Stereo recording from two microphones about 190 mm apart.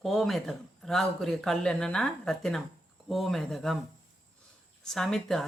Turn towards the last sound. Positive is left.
turn(degrees=0)  # may be behind; listen again after turning